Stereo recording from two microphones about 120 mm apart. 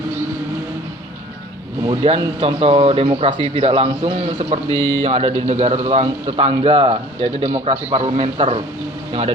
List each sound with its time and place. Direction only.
2.0 s a man's voice: 45° right (ahead or behind)
4.7 s a man's voice: 30° left (ahead or behind)
5.0 s a man's voice: 60° right (ahead or behind)